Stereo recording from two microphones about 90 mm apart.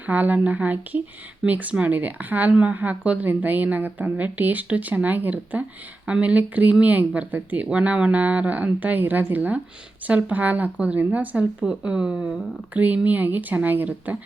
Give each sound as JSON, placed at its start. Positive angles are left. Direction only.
{"t": 0.0, "sound": "speech", "side_deg": -20}